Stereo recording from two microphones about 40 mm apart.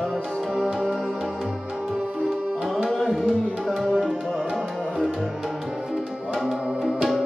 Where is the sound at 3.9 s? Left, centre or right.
Centre.